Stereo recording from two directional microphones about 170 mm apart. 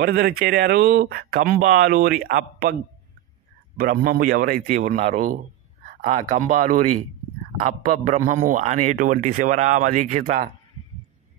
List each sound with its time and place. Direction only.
0.0 s speech: 70° right (ahead or behind)
3.7 s speech: 60° right (ahead or behind)